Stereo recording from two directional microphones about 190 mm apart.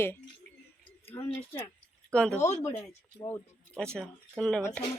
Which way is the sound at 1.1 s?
20° left (ahead or behind).